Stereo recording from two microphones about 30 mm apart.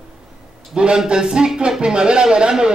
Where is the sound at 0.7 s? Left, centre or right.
Right.